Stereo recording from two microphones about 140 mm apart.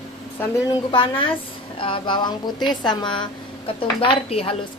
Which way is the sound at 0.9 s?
40° left (ahead or behind).